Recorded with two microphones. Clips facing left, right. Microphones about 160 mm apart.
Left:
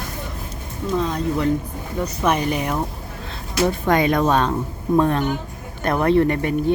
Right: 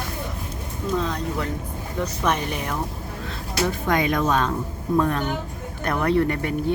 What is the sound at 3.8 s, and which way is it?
Speech, 35° left (ahead or behind).